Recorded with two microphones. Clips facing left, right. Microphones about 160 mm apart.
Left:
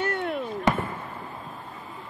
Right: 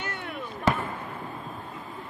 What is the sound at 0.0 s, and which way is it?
Fireworks, 55° left (ahead or behind).